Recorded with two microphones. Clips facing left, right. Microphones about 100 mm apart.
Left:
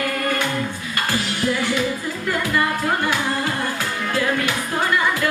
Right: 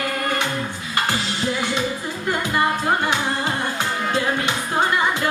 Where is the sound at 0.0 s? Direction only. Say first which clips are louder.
Left 1 dB; 25° right (ahead or behind).